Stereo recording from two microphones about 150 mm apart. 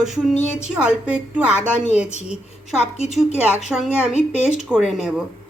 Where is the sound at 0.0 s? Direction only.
Centre (ahead or behind).